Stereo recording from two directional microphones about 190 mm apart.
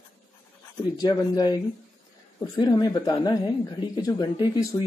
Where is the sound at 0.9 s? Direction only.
20° left (ahead or behind).